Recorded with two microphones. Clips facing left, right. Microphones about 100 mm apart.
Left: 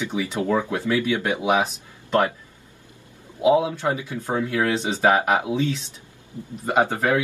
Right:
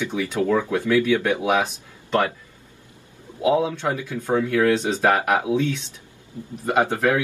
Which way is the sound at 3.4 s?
10° left (ahead or behind).